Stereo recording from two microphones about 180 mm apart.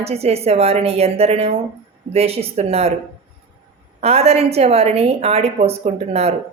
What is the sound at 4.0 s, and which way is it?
A woman's voice, 35° right (ahead or behind).